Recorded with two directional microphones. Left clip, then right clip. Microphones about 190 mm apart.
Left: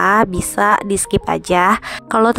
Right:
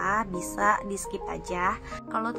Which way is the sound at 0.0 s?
50° left (ahead or behind).